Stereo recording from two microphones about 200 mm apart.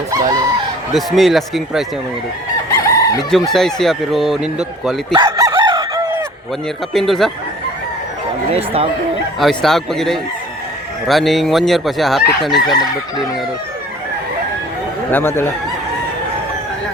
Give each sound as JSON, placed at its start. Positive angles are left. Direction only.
{"t": 0.1, "sound": "speech", "side_deg": -15}
{"t": 0.9, "sound": "speech", "side_deg": 0}
{"t": 2.7, "sound": "chicken", "side_deg": 15}
{"t": 3.5, "sound": "speech", "side_deg": 0}
{"t": 5.1, "sound": "chicken", "side_deg": -20}
{"t": 6.9, "sound": "speech", "side_deg": 0}
{"t": 8.5, "sound": "speech", "side_deg": -30}
{"t": 9.4, "sound": "speech", "side_deg": 0}
{"t": 15.1, "sound": "speech", "side_deg": 10}